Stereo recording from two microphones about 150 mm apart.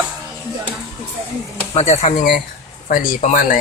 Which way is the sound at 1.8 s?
45° left (ahead or behind).